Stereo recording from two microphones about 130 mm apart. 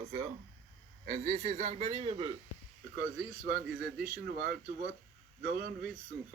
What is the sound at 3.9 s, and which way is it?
Speech, 10° right (ahead or behind).